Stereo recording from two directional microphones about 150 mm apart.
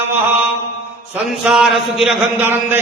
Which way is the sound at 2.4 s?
15° right (ahead or behind).